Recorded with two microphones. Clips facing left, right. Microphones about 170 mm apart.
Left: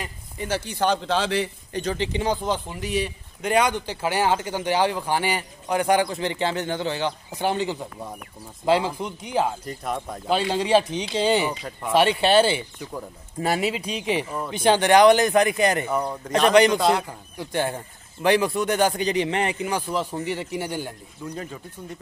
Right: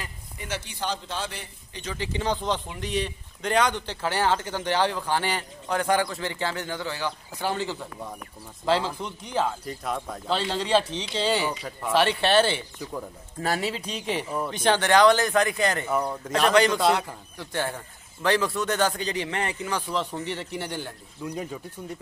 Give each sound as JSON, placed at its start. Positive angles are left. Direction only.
{"t": 0.4, "sound": "speech", "side_deg": 35}
{"t": 0.7, "sound": "speech", "side_deg": 60}
{"t": 1.7, "sound": "speech", "side_deg": 40}
{"t": 2.2, "sound": "a man's voice", "side_deg": 10}
{"t": 15.9, "sound": "speech", "side_deg": 0}
{"t": 16.4, "sound": "a man's voice", "side_deg": 15}
{"t": 21.2, "sound": "speech", "side_deg": -10}